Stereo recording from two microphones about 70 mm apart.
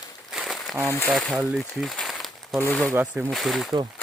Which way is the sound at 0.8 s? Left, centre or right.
Left.